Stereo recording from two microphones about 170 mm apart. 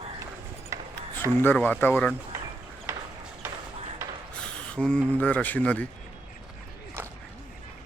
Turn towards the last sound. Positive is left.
turn(degrees=-15)  # may be behind; listen again after turning